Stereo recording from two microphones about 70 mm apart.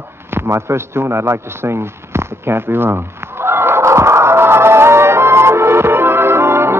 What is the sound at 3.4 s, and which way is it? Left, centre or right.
Music, right.